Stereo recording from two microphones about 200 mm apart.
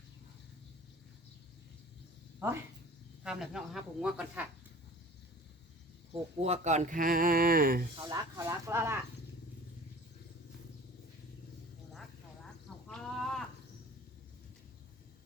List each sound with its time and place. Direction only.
2.4 s speech: 10° right (ahead or behind)
6.4 s speech: 35° right (ahead or behind)
7.9 s speech: 20° right (ahead or behind)
12.9 s cricket: centre (ahead or behind)